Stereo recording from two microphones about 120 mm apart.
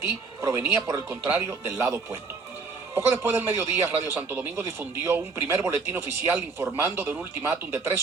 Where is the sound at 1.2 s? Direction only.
15° right (ahead or behind).